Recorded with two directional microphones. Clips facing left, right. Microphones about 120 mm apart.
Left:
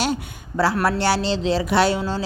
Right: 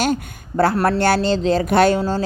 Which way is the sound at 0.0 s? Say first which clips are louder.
Right 3 dB; 50° right (ahead or behind).